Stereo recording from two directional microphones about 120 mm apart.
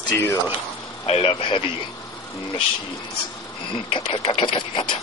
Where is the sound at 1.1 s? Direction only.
50° left (ahead or behind).